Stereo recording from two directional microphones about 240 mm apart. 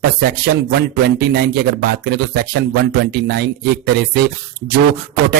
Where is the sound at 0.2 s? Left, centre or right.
Right.